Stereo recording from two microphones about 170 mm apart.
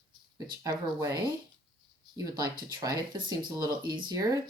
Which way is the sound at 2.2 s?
25° right (ahead or behind).